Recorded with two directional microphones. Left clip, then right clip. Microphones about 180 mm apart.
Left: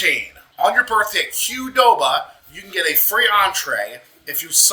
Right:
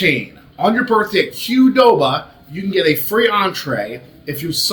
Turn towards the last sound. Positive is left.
turn(degrees=20)  # may be behind; listen again after turning